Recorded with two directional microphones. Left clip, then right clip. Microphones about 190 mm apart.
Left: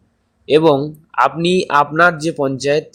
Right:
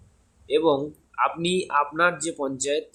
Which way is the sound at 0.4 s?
35° left (ahead or behind).